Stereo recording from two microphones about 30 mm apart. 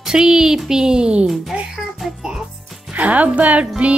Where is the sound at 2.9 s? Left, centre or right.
Right.